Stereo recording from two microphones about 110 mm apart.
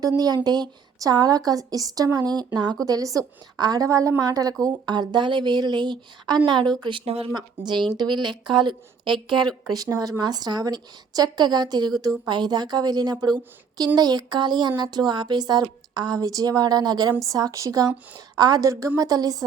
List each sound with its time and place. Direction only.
0.4 s a woman's voice: 40° right (ahead or behind)
7.0 s speech: 65° right (ahead or behind)
7.3 s a woman's voice: 45° right (ahead or behind)